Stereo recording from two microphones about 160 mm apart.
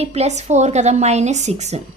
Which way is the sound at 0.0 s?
40° right (ahead or behind).